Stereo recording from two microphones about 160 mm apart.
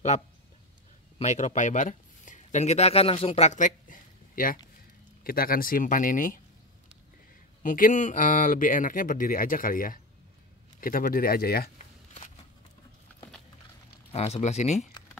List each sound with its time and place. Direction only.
1.1 s speech: 45° left (ahead or behind)
7.6 s speech: 55° left (ahead or behind)
14.1 s speech: 40° left (ahead or behind)